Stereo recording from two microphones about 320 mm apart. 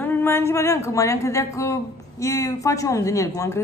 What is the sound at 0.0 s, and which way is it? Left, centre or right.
A woman's voice, centre.